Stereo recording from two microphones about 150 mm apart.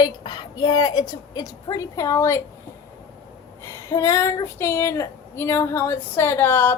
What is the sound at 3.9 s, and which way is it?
Speech, 20° left (ahead or behind).